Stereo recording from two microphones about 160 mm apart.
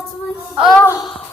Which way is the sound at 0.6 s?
Centre (ahead or behind).